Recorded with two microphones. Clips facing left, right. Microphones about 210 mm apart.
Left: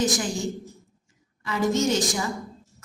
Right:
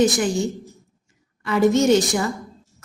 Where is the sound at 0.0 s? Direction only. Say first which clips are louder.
Right 7 dB; 65° right (ahead or behind).